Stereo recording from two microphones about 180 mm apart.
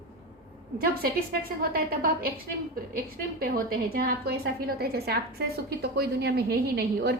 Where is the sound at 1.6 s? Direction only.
55° right (ahead or behind).